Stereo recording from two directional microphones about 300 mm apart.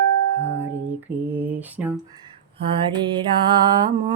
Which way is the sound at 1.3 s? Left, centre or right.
Centre.